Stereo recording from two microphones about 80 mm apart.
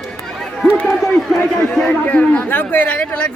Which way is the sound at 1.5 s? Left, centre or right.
Centre.